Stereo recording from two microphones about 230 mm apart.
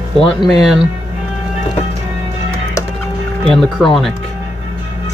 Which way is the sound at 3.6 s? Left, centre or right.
Centre.